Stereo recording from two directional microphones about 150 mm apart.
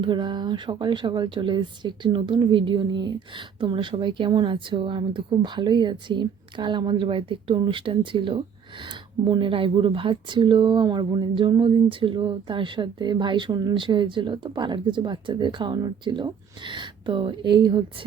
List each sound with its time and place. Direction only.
0.0 s speech: 30° right (ahead or behind)